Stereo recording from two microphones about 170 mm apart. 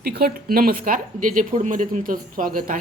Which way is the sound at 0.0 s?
70° right (ahead or behind).